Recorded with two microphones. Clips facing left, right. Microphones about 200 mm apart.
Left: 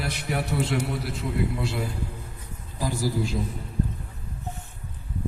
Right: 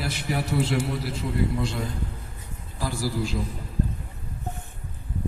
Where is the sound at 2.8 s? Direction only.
20° left (ahead or behind).